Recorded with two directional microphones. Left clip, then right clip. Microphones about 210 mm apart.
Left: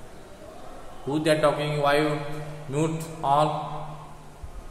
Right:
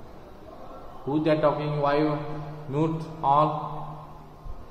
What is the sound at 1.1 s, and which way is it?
A man's voice, centre (ahead or behind).